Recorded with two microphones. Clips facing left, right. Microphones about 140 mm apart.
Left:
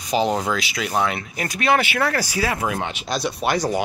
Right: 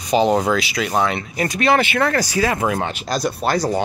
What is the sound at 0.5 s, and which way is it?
Speech, centre (ahead or behind).